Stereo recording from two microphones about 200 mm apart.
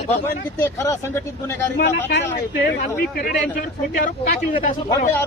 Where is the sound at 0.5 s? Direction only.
15° left (ahead or behind).